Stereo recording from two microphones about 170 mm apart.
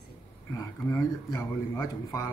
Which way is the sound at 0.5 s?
15° left (ahead or behind).